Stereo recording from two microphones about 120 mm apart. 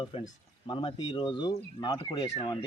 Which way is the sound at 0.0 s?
45° left (ahead or behind).